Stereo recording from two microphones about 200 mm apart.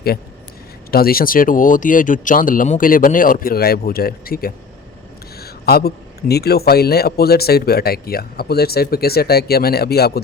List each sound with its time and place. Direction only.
0.9 s a man's voice: 50° left (ahead or behind)